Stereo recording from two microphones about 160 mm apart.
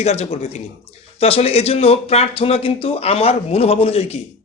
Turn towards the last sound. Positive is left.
turn(degrees=40)  # may be behind; listen again after turning